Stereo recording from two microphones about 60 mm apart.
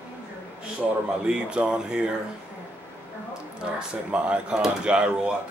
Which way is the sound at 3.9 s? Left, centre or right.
Centre.